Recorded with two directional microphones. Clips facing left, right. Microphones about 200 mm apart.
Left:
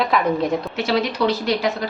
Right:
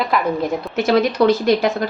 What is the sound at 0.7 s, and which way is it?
Speech, 50° right (ahead or behind).